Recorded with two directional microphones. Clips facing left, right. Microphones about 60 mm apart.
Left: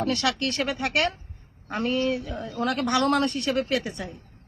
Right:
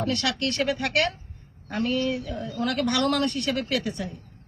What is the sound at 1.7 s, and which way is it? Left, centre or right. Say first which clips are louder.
A man's voice: left 1 dB; left.